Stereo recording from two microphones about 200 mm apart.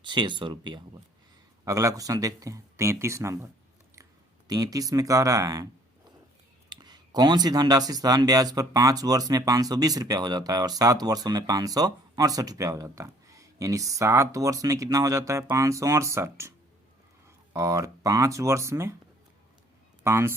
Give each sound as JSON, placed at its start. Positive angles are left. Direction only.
{"t": 0.0, "sound": "speech", "side_deg": -25}
{"t": 6.7, "sound": "speech", "side_deg": -20}
{"t": 17.5, "sound": "speech", "side_deg": -15}
{"t": 20.1, "sound": "speech", "side_deg": -15}